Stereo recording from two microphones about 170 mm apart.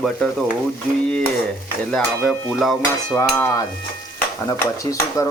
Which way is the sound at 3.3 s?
15° left (ahead or behind).